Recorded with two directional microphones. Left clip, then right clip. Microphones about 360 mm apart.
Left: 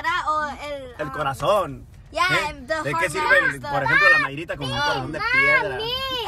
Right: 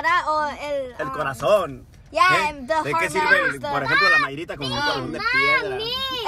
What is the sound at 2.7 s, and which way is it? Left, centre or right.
A woman's voice, centre.